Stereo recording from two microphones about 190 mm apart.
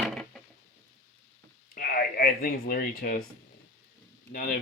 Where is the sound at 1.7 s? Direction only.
50° left (ahead or behind).